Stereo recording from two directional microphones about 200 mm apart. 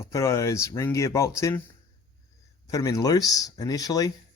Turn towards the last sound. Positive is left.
turn(degrees=20)  # may be behind; listen again after turning